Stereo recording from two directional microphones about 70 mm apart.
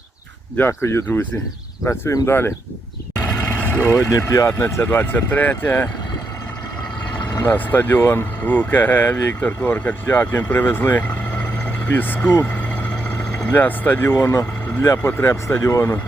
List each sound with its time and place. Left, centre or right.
0.7 s speech: left
2.2 s speech: left
3.5 s vehicle: left
3.8 s speech: left
7.3 s speech: left
12.2 s speech: left
13.5 s speech: left
14.1 s speech: left